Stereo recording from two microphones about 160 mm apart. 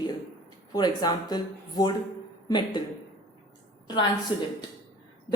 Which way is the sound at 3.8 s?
25° left (ahead or behind).